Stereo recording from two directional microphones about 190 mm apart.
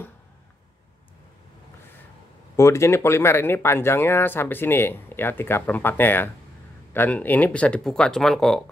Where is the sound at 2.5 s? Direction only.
15° left (ahead or behind).